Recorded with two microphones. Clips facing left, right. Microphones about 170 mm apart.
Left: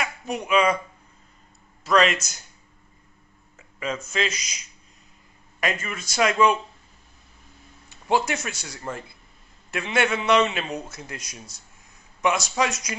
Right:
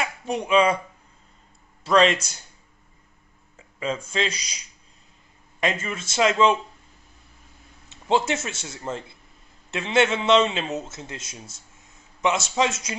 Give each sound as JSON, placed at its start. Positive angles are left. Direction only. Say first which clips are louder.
{"t": 0.0, "sound": "speech", "louder": "right 2 dB", "side_deg": -30}
{"t": 1.9, "sound": "a man's voice", "louder": "right 2 dB", "side_deg": -30}
{"t": 3.5, "sound": "a man's voice", "louder": "right 2 dB", "side_deg": -30}
{"t": 7.9, "sound": "a man's voice", "louder": "right 1 dB", "side_deg": -25}